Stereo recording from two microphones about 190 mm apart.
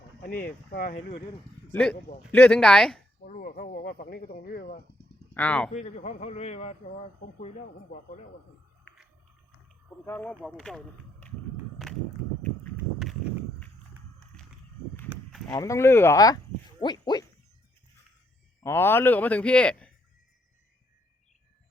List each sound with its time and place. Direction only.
0.2 s speech: 55° left (ahead or behind)
1.7 s speech: 5° left (ahead or behind)
3.2 s speech: 45° left (ahead or behind)
5.3 s speech: 5° left (ahead or behind)
5.7 s speech: 35° left (ahead or behind)
10.1 s a man's voice: 10° left (ahead or behind)
11.8 s walk: centre (ahead or behind)
15.1 s a sound: centre (ahead or behind)
15.5 s speech: 15° left (ahead or behind)
18.6 s a man's voice: 10° left (ahead or behind)